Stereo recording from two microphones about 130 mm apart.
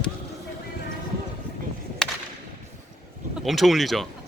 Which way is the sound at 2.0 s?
5° left (ahead or behind).